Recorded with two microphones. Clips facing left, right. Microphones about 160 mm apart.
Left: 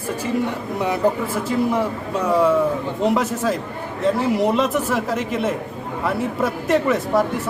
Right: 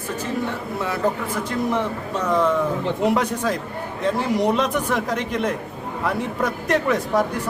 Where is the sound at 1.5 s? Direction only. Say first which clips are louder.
Left 3 dB; 10° left (ahead or behind).